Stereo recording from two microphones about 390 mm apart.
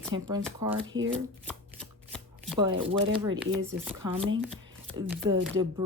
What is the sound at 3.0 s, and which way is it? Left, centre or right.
Speech, centre.